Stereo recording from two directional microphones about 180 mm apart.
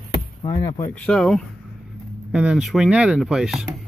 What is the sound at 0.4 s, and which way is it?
Speech, 20° left (ahead or behind).